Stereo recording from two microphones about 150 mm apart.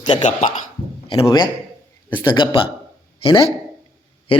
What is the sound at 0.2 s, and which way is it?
Speech, 55° left (ahead or behind).